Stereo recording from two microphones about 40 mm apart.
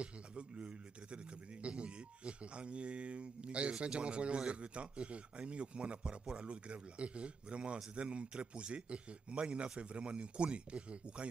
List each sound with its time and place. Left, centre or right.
0.0 s a man's voice: right